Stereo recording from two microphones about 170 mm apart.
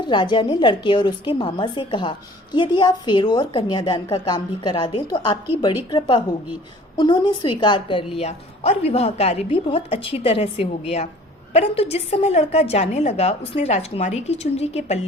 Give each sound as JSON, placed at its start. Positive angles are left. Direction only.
{"t": 0.0, "sound": "a woman's voice", "side_deg": 25}